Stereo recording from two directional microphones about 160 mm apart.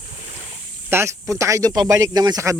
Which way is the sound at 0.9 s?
15° right (ahead or behind).